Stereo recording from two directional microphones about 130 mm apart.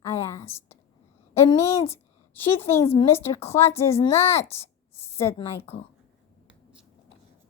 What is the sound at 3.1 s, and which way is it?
A woman's voice, 20° left (ahead or behind).